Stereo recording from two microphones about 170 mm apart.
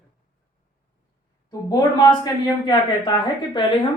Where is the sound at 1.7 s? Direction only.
20° left (ahead or behind).